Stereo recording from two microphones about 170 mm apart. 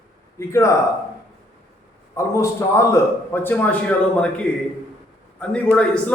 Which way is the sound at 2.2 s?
15° left (ahead or behind).